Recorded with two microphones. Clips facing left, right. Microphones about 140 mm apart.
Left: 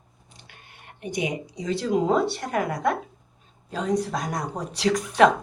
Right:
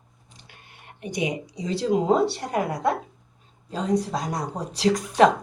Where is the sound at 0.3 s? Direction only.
35° right (ahead or behind).